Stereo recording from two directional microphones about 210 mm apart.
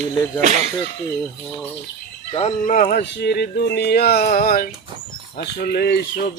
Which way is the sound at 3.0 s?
55° left (ahead or behind).